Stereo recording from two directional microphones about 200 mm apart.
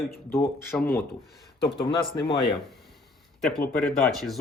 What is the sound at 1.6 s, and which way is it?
Speech, 25° left (ahead or behind).